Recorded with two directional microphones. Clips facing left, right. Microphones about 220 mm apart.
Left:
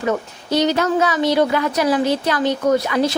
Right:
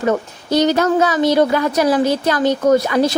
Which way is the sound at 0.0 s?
40° right (ahead or behind).